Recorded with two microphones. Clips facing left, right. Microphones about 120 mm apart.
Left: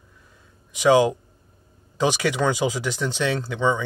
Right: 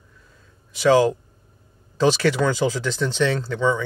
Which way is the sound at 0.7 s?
20° left (ahead or behind).